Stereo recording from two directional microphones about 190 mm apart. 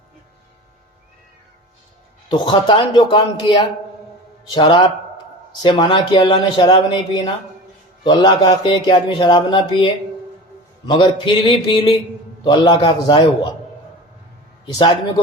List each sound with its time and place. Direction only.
2.3 s a man's voice: 25° left (ahead or behind)
4.5 s a man's voice: 25° left (ahead or behind)
14.6 s a man's voice: 25° left (ahead or behind)